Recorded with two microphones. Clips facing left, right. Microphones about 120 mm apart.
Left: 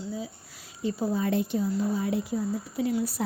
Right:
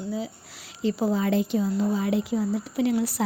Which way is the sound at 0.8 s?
90° right.